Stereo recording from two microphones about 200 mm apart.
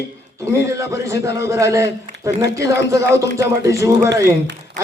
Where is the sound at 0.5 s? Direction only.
15° right (ahead or behind).